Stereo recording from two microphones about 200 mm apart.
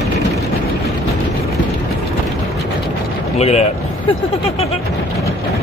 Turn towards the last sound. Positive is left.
turn(degrees=35)  # may be behind; listen again after turning